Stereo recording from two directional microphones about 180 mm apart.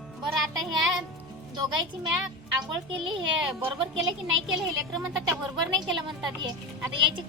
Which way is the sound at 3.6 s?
30° right (ahead or behind).